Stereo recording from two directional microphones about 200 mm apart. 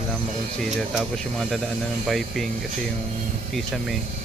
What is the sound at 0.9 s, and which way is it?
Speech, centre (ahead or behind).